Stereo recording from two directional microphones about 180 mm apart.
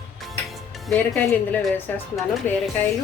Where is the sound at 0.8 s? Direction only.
10° left (ahead or behind).